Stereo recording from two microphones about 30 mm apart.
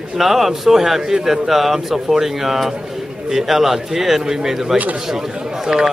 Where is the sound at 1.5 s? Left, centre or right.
Centre.